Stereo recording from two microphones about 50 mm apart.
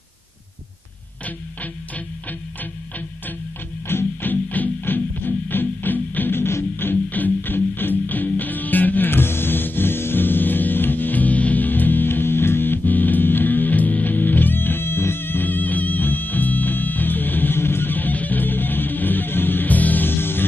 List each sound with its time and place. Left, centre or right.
3.8 s music: left